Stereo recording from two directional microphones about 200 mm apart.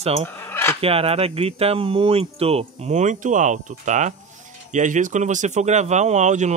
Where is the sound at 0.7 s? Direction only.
30° right (ahead or behind).